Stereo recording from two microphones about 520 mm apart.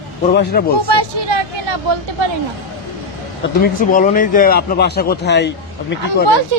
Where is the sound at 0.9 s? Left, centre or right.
Right.